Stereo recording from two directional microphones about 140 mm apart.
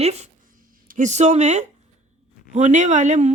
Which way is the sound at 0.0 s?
50° right (ahead or behind).